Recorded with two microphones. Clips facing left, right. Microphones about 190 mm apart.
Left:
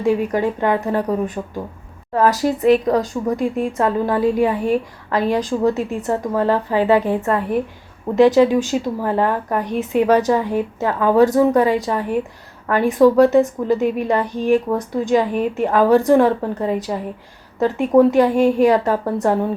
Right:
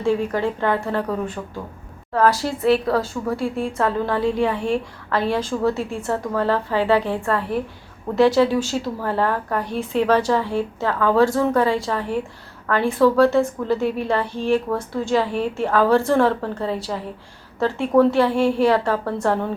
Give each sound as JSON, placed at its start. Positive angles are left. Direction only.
{"t": 0.0, "sound": "a woman's voice", "side_deg": 15}